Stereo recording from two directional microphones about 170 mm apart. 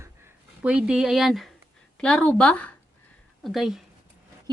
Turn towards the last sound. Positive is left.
turn(degrees=0)  # may be behind; listen again after turning